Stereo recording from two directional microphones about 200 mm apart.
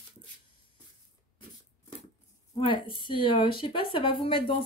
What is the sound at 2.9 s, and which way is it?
Speech, 25° left (ahead or behind).